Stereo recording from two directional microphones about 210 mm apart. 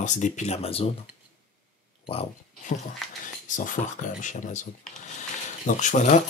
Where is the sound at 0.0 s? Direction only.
35° left (ahead or behind).